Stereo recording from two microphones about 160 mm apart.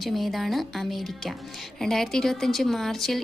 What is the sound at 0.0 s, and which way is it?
Speech, centre (ahead or behind).